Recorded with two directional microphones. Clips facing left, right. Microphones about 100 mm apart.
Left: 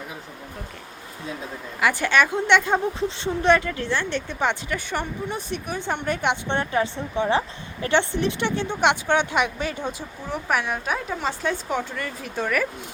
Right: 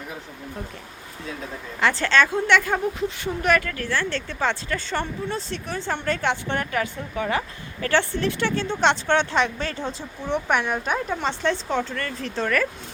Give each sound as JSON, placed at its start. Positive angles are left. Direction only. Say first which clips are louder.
{"t": 1.8, "sound": "a woman's voice", "louder": "even", "side_deg": 15}
{"t": 10.3, "sound": "a woman's voice", "louder": "right 2 dB", "side_deg": 0}